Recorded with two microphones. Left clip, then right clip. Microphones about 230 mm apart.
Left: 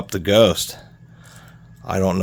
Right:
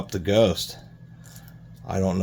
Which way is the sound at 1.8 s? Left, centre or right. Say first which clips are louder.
Left 6 dB; left.